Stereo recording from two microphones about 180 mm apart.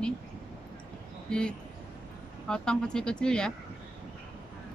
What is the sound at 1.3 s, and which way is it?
A woman's voice, 5° left (ahead or behind).